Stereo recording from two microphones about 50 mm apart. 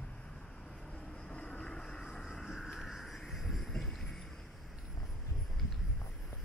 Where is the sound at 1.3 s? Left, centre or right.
Centre.